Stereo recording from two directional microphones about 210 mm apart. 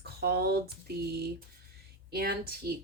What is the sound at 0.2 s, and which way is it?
A woman's voice, 50° right (ahead or behind).